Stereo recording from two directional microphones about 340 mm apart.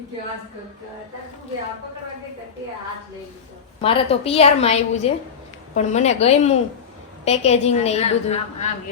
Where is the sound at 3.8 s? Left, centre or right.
Centre.